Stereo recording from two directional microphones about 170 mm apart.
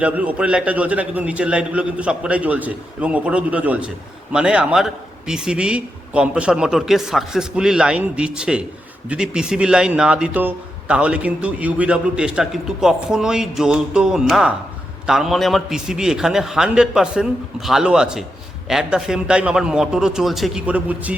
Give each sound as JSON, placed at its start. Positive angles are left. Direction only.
{"t": 0.0, "sound": "a man's voice", "side_deg": -10}